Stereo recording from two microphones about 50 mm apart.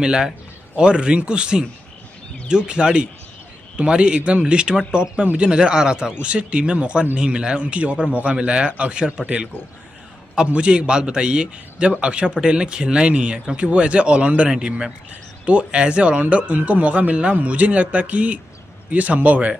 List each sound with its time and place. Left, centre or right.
0.0 s a man's voice: centre